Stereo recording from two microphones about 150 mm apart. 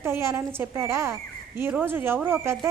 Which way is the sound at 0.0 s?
15° right (ahead or behind).